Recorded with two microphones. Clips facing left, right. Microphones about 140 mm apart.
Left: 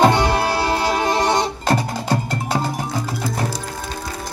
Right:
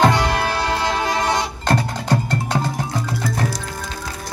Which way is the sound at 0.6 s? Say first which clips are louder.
Left 2 dB; 10° left (ahead or behind).